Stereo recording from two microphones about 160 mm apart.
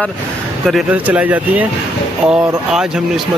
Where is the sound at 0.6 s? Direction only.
5° right (ahead or behind).